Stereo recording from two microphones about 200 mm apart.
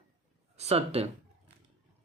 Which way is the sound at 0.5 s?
30° right (ahead or behind).